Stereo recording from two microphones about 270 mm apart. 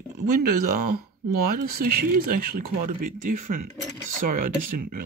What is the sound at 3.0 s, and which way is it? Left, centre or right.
Speech, right.